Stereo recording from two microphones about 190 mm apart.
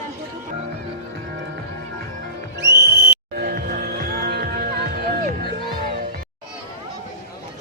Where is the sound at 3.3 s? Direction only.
50° right (ahead or behind).